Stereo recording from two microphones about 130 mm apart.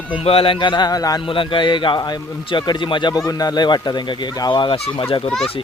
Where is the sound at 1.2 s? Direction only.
40° left (ahead or behind).